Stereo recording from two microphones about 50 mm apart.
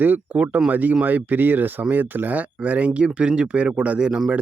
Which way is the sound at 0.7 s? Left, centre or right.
Right.